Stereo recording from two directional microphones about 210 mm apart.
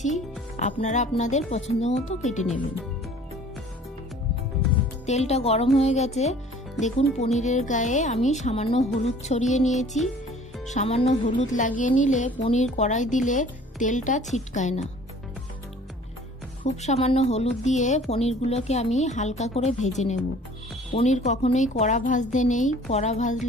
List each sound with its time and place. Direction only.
0.0 s speech: 35° left (ahead or behind)
5.0 s speech: 30° left (ahead or behind)
16.6 s speech: 30° left (ahead or behind)
20.9 s speech: 35° left (ahead or behind)